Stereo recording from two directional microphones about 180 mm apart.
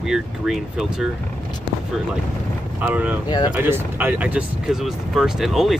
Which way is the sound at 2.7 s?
10° right (ahead or behind).